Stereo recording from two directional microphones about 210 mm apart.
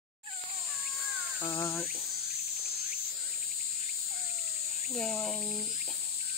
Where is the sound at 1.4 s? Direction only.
25° left (ahead or behind).